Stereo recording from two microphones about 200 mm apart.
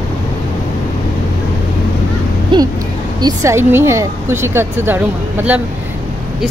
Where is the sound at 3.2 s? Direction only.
15° right (ahead or behind).